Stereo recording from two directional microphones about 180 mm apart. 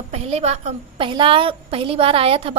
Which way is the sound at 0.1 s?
35° right (ahead or behind).